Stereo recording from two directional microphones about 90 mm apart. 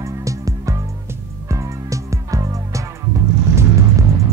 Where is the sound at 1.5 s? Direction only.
35° right (ahead or behind).